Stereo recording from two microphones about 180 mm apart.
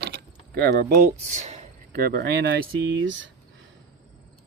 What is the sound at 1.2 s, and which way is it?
Speech, 40° right (ahead or behind).